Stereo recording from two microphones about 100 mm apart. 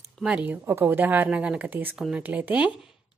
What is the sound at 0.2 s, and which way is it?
A woman's voice, 10° right (ahead or behind).